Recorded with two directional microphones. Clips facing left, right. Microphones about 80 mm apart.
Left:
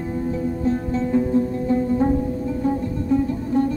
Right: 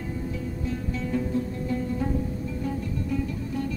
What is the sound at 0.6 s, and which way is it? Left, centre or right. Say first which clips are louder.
Music: left 9 dB; left.